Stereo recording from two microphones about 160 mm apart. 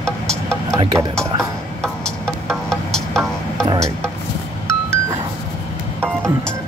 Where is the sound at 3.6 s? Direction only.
20° right (ahead or behind).